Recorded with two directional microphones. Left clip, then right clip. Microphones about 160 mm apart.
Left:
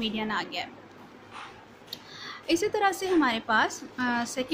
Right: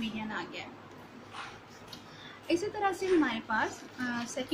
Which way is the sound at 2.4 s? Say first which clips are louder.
Left 6 dB; 60° left (ahead or behind).